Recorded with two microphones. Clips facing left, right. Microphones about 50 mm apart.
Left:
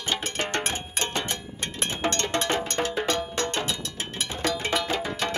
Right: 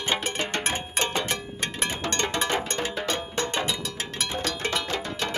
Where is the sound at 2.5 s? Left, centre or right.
Right.